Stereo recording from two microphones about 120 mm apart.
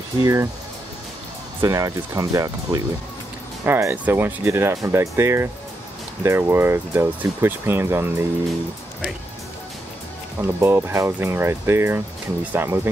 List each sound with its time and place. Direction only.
0.2 s speech: 25° right (ahead or behind)
1.6 s speech: 25° right (ahead or behind)
10.4 s speech: 20° right (ahead or behind)